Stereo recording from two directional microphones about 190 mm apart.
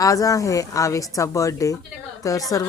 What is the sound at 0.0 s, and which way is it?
A woman's voice, 20° left (ahead or behind).